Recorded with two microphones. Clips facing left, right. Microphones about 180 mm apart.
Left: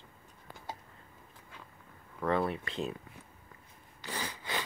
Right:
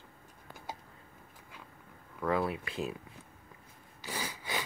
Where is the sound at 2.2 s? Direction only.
5° right (ahead or behind).